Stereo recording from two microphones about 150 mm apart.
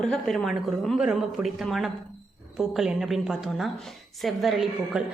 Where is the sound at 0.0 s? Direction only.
5° left (ahead or behind).